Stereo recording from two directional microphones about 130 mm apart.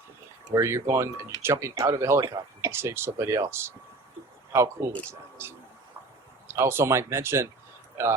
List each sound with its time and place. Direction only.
0.5 s speech: 25° right (ahead or behind)